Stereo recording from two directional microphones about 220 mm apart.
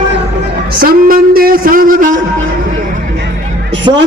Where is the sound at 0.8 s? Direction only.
40° right (ahead or behind).